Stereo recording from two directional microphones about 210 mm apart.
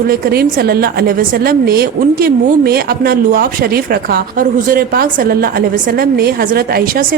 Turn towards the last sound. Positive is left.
turn(degrees=-45)  # may be behind; listen again after turning